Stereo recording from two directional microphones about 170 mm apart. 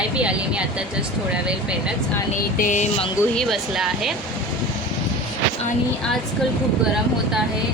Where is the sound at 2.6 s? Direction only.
45° left (ahead or behind).